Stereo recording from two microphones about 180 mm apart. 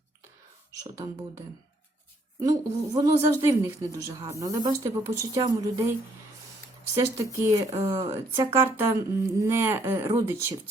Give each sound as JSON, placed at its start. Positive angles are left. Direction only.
{"t": 2.4, "sound": "a woman's voice", "side_deg": -20}